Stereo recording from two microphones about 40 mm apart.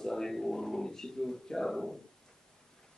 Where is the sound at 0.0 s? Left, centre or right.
Centre.